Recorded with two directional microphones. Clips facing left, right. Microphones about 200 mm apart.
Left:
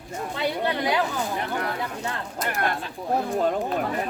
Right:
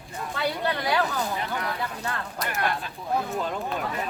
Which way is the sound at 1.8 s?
20° left (ahead or behind).